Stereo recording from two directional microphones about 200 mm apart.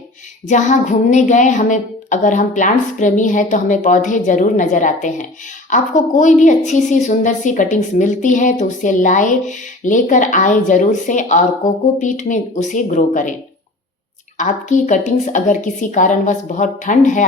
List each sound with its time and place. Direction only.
0.4 s a woman's voice: 35° left (ahead or behind)
14.3 s a woman's voice: 35° left (ahead or behind)